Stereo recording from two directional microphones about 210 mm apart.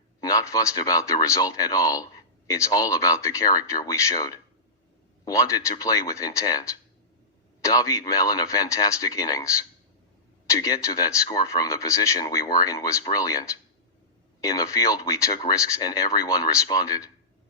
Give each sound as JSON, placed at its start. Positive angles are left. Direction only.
{"t": 0.2, "sound": "speech", "side_deg": 15}
{"t": 10.5, "sound": "speech", "side_deg": 15}